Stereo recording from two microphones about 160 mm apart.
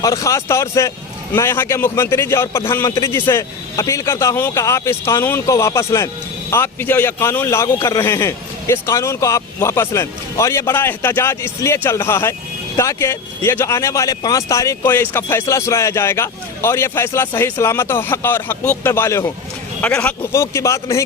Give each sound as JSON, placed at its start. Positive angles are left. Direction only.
{"t": 0.0, "sound": "speech", "side_deg": 20}